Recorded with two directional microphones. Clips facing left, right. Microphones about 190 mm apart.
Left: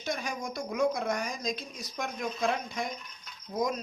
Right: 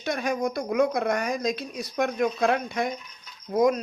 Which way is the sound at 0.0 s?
65° right (ahead or behind).